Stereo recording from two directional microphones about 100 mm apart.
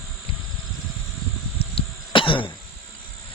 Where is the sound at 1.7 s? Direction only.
60° left (ahead or behind).